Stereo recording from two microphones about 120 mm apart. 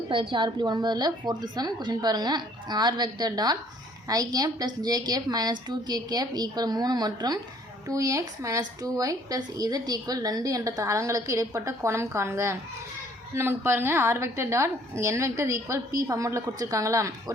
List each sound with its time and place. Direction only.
0.1 s a woman's voice: 45° right (ahead or behind); by 17.3 s 25° right (ahead or behind)